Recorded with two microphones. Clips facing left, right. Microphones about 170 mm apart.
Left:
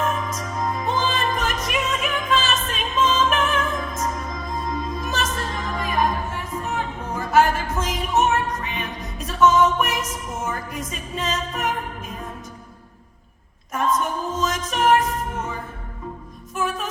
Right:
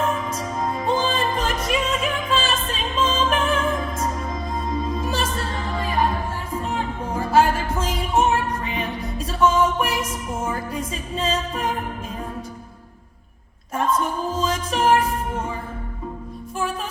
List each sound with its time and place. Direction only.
0.0 s music: 30° right (ahead or behind)
14.3 s music: 30° right (ahead or behind)
16.6 s music: 30° right (ahead or behind)